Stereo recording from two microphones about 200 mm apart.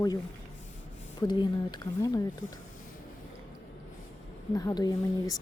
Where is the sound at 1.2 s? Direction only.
20° left (ahead or behind).